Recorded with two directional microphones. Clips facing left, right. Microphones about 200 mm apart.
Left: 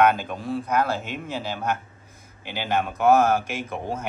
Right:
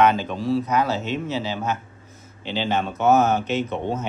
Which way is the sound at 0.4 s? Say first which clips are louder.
Right 6 dB; 50° left (ahead or behind).